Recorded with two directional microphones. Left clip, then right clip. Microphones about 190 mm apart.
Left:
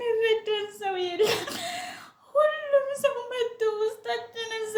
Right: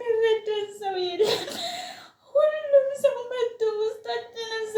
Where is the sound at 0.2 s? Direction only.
10° left (ahead or behind).